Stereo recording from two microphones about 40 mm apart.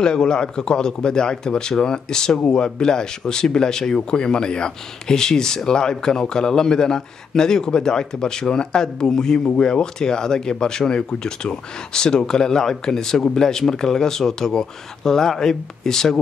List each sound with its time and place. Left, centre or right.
0.0 s speech: centre